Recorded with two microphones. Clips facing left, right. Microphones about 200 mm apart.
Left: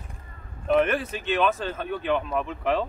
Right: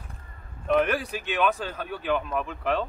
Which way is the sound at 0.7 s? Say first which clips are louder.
Left 1 dB; centre (ahead or behind).